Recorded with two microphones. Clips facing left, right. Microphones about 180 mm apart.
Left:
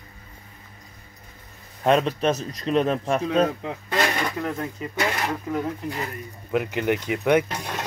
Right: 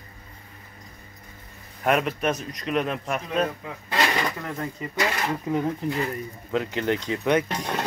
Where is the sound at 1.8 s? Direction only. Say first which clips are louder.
Left 3 dB; 25° left (ahead or behind).